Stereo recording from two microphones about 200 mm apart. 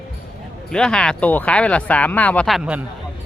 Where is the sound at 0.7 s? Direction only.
5° left (ahead or behind).